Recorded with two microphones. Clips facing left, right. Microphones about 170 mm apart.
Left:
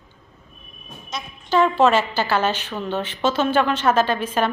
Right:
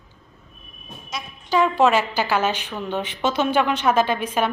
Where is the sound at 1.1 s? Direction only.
5° right (ahead or behind).